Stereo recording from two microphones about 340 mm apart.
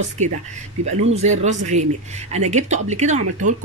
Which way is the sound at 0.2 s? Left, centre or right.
Centre.